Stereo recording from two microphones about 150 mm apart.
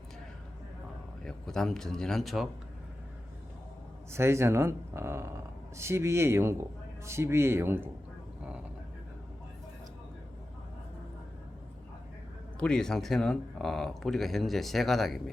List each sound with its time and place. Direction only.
1.2 s speech: 5° left (ahead or behind)
4.1 s speech: 15° right (ahead or behind)
12.5 s speech: 5° left (ahead or behind)